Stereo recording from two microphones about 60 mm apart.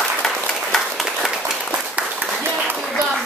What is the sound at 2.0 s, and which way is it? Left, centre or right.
Applause, right.